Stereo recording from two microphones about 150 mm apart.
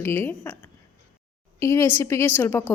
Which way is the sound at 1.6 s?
20° left (ahead or behind).